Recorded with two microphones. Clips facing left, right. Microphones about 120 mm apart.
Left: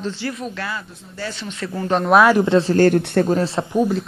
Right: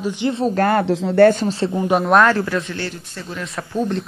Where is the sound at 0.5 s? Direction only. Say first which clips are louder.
Right 12 dB; 55° right (ahead or behind).